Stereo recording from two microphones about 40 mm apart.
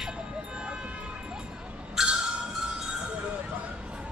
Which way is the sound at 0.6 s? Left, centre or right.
Right.